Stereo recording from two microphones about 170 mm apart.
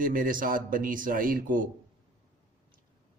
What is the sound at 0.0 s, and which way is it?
A man's voice, 55° right (ahead or behind).